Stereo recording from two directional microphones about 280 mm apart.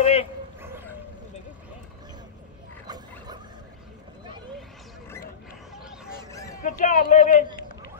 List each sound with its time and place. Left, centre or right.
0.0 s bow-wow: left
5.8 s fowl: centre
6.3 s a sound: centre
6.8 s speech: left